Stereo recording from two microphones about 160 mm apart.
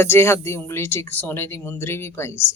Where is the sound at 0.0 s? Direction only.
15° left (ahead or behind).